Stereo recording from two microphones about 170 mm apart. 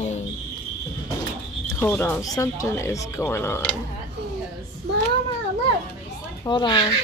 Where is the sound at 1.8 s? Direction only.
15° left (ahead or behind).